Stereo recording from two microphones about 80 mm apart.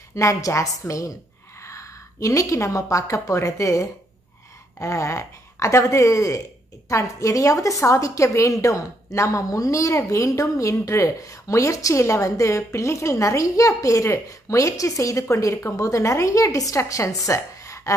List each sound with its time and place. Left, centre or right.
0.1 s a woman's voice: left